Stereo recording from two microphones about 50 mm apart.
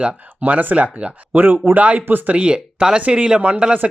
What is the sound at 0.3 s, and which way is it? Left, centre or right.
Speech, right.